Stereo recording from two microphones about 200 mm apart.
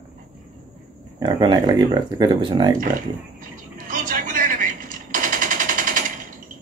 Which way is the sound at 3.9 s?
40° right (ahead or behind).